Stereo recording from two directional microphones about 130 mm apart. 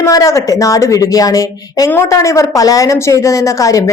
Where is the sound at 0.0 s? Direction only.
25° left (ahead or behind).